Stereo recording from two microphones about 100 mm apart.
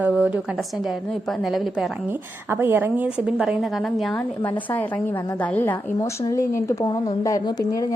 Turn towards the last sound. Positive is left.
turn(degrees=35)  # may be behind; listen again after turning